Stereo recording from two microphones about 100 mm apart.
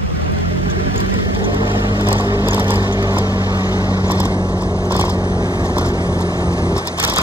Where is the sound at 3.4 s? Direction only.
40° left (ahead or behind).